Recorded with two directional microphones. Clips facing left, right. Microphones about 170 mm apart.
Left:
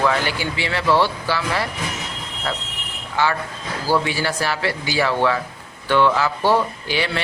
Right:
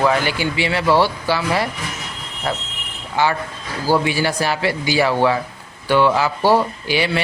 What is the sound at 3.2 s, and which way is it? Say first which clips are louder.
A man's voice: right 2 dB; 15° right (ahead or behind).